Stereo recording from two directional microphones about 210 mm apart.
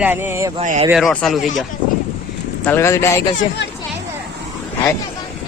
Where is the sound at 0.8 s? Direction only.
Centre (ahead or behind).